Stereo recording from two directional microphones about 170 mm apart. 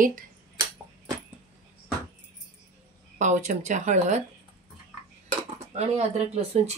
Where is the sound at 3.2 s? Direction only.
45° right (ahead or behind).